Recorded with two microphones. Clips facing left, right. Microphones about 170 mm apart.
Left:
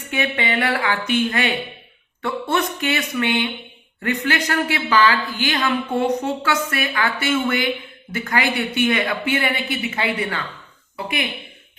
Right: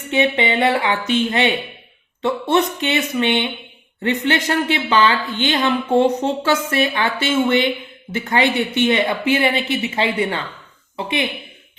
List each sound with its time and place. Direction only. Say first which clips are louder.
0.1 s a woman's voice: right 5 dB; 25° right (ahead or behind)